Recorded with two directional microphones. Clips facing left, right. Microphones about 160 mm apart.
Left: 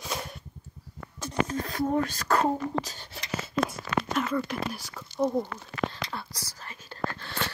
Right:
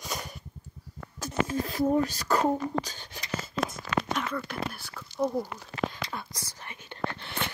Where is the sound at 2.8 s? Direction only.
Centre (ahead or behind).